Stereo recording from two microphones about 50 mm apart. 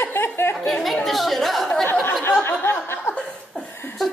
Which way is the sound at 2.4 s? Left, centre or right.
Left.